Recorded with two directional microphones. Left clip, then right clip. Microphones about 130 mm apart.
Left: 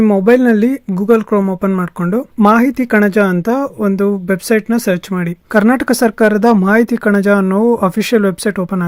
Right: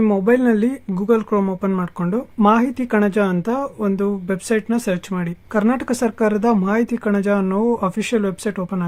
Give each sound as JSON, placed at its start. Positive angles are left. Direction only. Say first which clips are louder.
{"t": 0.0, "sound": "speech", "louder": "left 6 dB", "side_deg": 35}